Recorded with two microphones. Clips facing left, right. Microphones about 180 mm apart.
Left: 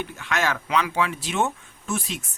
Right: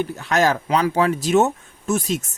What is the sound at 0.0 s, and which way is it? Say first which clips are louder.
Speech: right 7 dB; 40° right (ahead or behind).